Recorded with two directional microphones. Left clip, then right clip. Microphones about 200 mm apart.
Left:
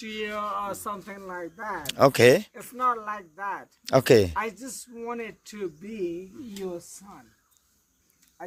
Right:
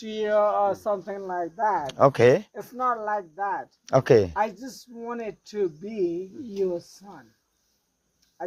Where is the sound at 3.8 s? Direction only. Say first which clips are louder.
Even; 55° left (ahead or behind).